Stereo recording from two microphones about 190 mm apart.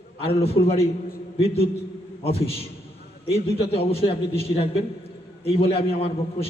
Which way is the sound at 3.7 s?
30° left (ahead or behind).